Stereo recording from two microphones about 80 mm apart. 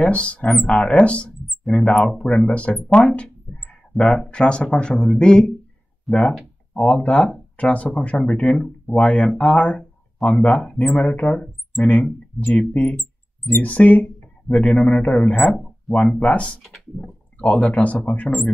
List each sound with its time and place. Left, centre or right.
0.0 s speech: centre
1.6 s speech: centre
2.0 s speech: centre
6.7 s speech: centre
10.1 s speech: centre
10.4 s speech: centre
16.6 s speech: centre
17.4 s speech: centre